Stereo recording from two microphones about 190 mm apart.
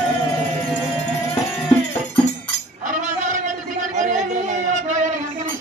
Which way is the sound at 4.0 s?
40° right (ahead or behind).